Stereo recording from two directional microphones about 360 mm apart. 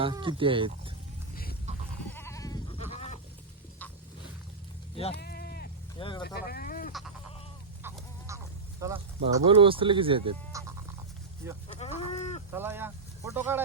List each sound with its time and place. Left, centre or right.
0.0 s speech: centre
1.7 s goat: centre
2.0 s goat: centre
5.1 s sheep: left
6.0 s speech: centre
6.2 s speech: left
7.8 s a sound: centre
8.8 s speech: centre
11.8 s chicken: centre
12.5 s speech: centre